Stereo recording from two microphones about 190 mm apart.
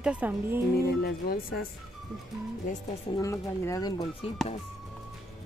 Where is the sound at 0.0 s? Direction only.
5° right (ahead or behind).